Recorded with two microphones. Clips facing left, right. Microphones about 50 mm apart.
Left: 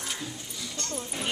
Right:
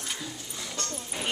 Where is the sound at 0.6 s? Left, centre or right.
Right.